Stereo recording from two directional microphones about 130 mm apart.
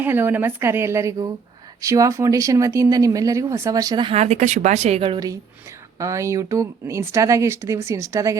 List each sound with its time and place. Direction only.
0.0 s a woman's voice: 15° right (ahead or behind); by 4.1 s 30° right (ahead or behind)
4.1 s speech: 55° right (ahead or behind)
6.0 s speech: 25° right (ahead or behind)